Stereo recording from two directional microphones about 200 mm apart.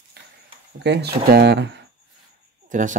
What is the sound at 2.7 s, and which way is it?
Speech, 40° right (ahead or behind).